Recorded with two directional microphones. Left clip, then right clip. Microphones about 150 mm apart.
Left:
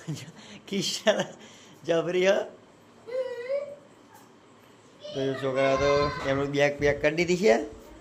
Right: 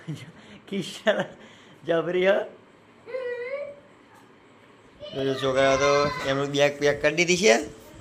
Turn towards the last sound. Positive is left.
turn(degrees=5)  # may be behind; listen again after turning